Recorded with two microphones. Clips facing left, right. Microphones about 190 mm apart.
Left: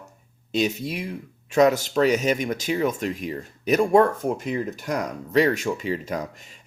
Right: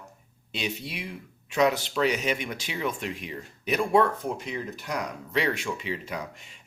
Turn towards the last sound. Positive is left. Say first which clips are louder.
# left 6 dB
turn(degrees=40)  # may be behind; listen again after turning